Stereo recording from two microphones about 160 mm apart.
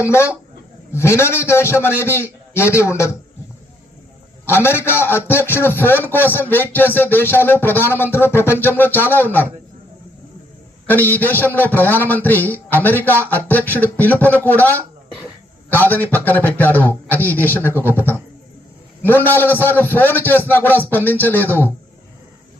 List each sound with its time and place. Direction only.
0.1 s a man's voice: 15° left (ahead or behind)
4.4 s a man's voice: 15° left (ahead or behind)
10.8 s a man's voice: 10° left (ahead or behind)